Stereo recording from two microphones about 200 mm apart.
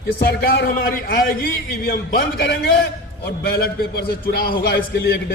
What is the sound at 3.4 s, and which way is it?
A man's voice, 50° left (ahead or behind).